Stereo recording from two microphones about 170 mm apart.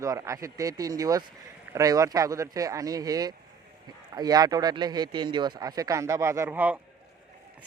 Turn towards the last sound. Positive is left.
turn(degrees=-10)  # may be behind; listen again after turning